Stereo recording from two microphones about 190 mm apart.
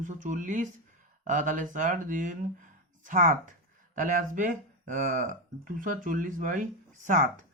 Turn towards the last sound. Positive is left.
turn(degrees=-40)  # may be behind; listen again after turning